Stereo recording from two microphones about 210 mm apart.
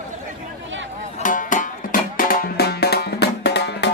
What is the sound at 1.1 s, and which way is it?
Music, 40° left (ahead or behind).